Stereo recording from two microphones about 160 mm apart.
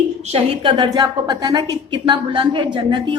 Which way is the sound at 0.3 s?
35° right (ahead or behind).